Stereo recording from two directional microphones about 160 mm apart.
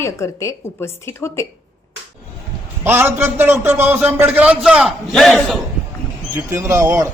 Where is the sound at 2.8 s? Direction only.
15° right (ahead or behind); by 5.6 s centre (ahead or behind).